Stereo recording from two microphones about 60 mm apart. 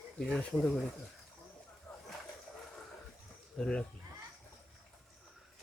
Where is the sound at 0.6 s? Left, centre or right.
Centre.